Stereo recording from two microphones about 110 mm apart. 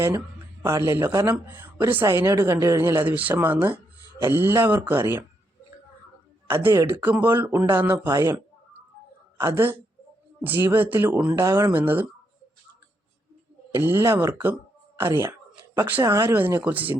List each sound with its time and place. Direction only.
0.6 s a woman's voice: 25° right (ahead or behind)
6.5 s a woman's voice: 20° right (ahead or behind)
9.4 s a woman's voice: 20° right (ahead or behind)
11.3 s a woman's voice: 25° right (ahead or behind)
13.8 s a woman's voice: 20° right (ahead or behind)
15.2 s a sound: 20° right (ahead or behind)
16.0 s a woman's voice: 30° right (ahead or behind)
16.6 s speech: 15° right (ahead or behind)